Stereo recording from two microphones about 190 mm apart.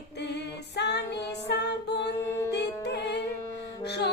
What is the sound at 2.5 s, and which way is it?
Music, 65° left (ahead or behind).